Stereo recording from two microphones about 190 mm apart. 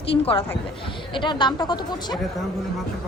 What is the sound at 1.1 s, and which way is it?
A woman's voice, 25° left (ahead or behind).